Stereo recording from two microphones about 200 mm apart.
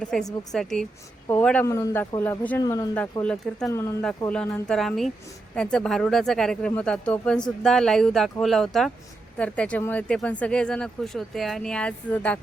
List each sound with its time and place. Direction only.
0.0 s speech: 5° left (ahead or behind)
2.6 s speech: 20° left (ahead or behind)
2.9 s speech: 5° left (ahead or behind)
3.7 s speech: 15° left (ahead or behind)